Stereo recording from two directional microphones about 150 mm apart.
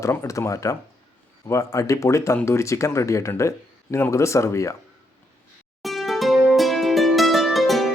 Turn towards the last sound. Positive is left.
turn(degrees=0)  # may be behind; listen again after turning